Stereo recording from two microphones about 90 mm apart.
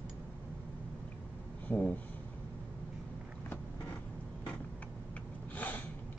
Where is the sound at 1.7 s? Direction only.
15° left (ahead or behind).